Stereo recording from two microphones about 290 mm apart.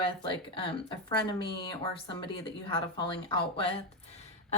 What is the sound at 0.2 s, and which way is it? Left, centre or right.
Speech, centre.